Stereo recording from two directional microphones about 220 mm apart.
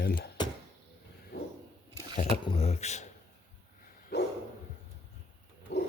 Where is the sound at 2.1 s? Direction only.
25° left (ahead or behind).